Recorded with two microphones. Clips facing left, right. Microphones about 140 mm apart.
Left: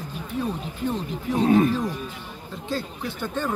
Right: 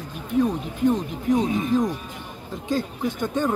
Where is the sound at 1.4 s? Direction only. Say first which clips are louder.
Left 7 dB; 60° left (ahead or behind).